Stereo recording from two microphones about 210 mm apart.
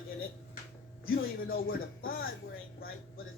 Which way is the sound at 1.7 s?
45° left (ahead or behind).